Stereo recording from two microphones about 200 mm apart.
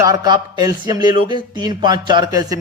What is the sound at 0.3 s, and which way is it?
Speech, 20° right (ahead or behind).